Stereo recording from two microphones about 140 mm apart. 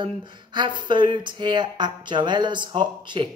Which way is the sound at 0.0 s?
35° right (ahead or behind).